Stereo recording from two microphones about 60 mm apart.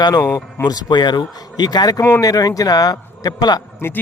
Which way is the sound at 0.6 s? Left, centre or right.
Left.